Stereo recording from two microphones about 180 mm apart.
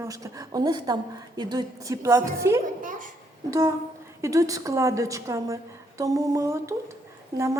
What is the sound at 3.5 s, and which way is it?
A woman's voice, 20° right (ahead or behind).